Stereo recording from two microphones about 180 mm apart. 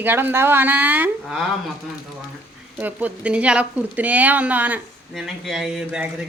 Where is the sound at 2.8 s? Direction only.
10° right (ahead or behind).